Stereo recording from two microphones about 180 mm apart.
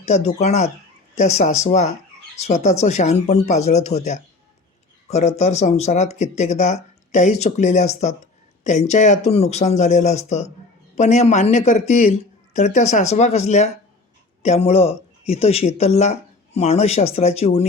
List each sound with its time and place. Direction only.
0.0 s speech: 35° left (ahead or behind)